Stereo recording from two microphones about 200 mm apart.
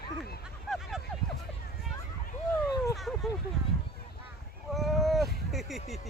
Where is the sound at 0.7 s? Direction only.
Centre (ahead or behind).